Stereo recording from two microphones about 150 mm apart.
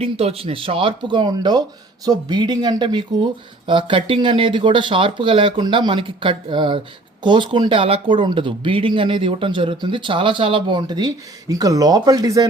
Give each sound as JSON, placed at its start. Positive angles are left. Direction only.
{"t": 0.0, "sound": "speech", "side_deg": -40}